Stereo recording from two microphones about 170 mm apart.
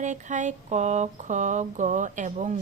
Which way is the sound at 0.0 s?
45° right (ahead or behind).